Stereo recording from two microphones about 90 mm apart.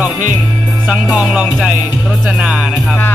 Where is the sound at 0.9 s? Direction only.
10° right (ahead or behind).